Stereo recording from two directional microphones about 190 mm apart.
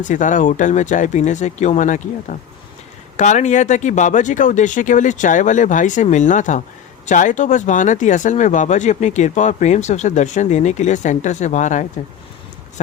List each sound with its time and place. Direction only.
0.1 s speech: 40° left (ahead or behind)
3.2 s speech: 40° left (ahead or behind)